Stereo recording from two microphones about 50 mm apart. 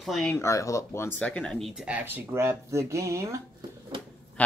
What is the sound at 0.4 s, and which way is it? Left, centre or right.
Speech, left.